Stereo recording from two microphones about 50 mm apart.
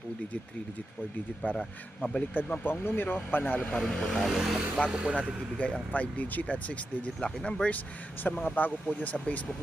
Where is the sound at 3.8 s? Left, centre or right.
Centre.